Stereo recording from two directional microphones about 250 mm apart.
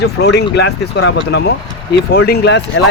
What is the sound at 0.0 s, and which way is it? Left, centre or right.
Speech, left.